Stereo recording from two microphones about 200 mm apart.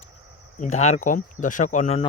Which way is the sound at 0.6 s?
35° left (ahead or behind).